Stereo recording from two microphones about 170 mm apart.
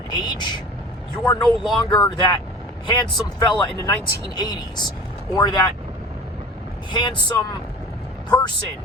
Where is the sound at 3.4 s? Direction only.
25° left (ahead or behind).